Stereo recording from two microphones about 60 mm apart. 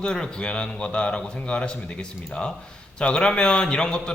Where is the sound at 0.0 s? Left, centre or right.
Centre.